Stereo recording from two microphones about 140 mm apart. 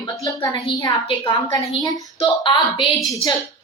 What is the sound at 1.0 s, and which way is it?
A woman's voice, 40° left (ahead or behind).